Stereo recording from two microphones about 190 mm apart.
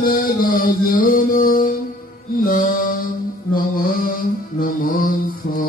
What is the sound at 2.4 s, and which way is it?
Mantra, 50° left (ahead or behind).